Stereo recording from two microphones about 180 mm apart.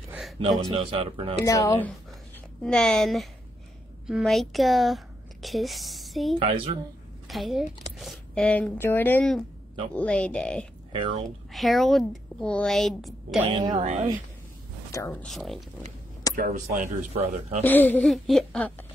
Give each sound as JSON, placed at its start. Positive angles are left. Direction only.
{"t": 0.9, "sound": "speech", "side_deg": -30}
{"t": 1.4, "sound": "speech", "side_deg": 20}
{"t": 2.6, "sound": "a woman's voice", "side_deg": 5}
{"t": 6.4, "sound": "speech", "side_deg": -30}
{"t": 7.2, "sound": "a woman's voice", "side_deg": 0}
{"t": 10.9, "sound": "speech", "side_deg": -30}
{"t": 11.2, "sound": "a woman's voice", "side_deg": 0}
{"t": 13.4, "sound": "speech", "side_deg": -25}
{"t": 15.0, "sound": "a woman's voice", "side_deg": 5}
{"t": 16.3, "sound": "speech", "side_deg": -45}
{"t": 17.6, "sound": "a woman's voice", "side_deg": 10}